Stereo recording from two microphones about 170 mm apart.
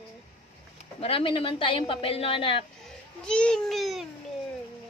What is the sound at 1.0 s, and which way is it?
A woman's voice, 30° left (ahead or behind).